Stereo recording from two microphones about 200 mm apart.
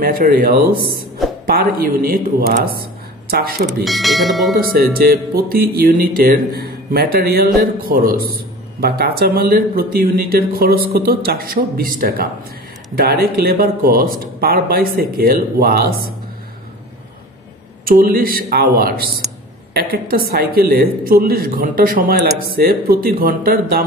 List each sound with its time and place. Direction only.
0.0 s speech: 45° right (ahead or behind)
3.8 s speech: centre (ahead or behind)
4.6 s speech: 50° right (ahead or behind)
17.8 s speech: 45° right (ahead or behind)